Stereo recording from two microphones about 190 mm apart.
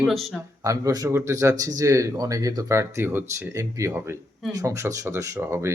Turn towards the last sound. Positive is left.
turn(degrees=-15)  # may be behind; listen again after turning